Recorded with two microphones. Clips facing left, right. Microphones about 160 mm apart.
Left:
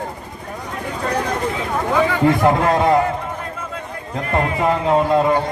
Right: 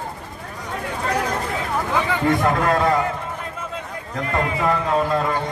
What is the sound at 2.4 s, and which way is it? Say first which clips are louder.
Speech: left 3 dB; 25° left (ahead or behind).